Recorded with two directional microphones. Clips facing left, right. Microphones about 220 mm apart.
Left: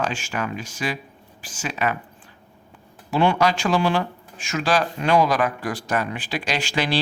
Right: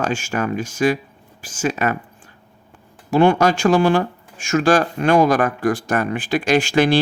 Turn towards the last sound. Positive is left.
turn(degrees=-50)  # may be behind; listen again after turning